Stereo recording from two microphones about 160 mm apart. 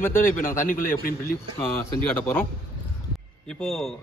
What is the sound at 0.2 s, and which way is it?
A man's voice, 60° left (ahead or behind).